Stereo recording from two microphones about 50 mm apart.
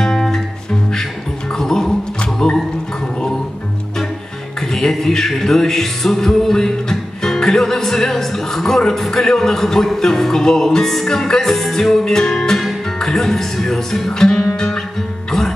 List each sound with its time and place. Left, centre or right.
0.0 s music: centre
1.6 s music: centre
4.7 s music: centre